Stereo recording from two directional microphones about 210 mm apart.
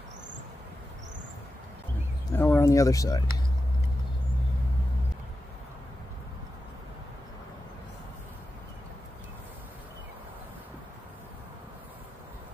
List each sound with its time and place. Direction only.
2.3 s speech: 10° left (ahead or behind)